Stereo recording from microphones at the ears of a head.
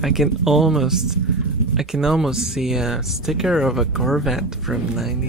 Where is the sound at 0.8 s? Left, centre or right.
Right.